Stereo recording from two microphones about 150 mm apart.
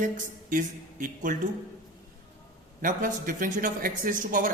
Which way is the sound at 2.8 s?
60° right (ahead or behind).